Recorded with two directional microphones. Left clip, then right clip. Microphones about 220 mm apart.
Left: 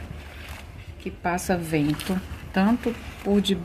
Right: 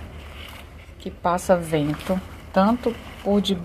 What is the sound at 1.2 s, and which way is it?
A woman's voice, 5° right (ahead or behind).